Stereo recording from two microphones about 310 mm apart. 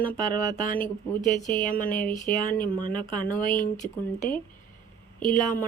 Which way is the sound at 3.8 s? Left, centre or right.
Centre.